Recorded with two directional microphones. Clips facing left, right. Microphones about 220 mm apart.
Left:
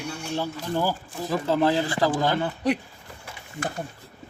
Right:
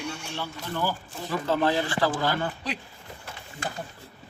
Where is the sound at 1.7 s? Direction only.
35° left (ahead or behind).